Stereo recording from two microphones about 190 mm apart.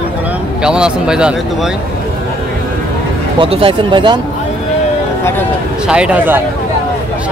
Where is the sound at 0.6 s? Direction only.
5° right (ahead or behind).